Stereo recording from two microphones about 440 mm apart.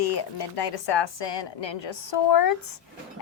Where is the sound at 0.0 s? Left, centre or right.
Left.